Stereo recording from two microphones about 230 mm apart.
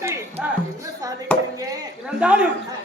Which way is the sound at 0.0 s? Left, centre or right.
Centre.